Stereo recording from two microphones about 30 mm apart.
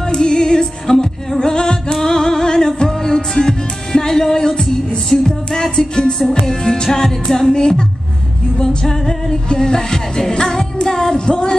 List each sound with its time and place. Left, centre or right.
0.0 s music: left
1.4 s singing: left
2.0 s music: centre
7.5 s music: left
8.5 s music: centre